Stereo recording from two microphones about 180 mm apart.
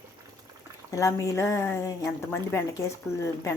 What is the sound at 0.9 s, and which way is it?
A woman's voice, 15° left (ahead or behind).